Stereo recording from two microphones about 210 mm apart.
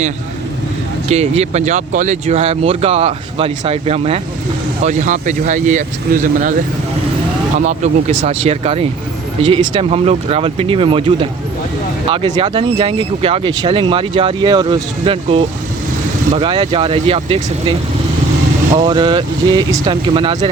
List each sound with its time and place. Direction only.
1.0 s speech: 30° right (ahead or behind)
7.6 s speech: 35° right (ahead or behind)
18.9 s speech: 20° right (ahead or behind)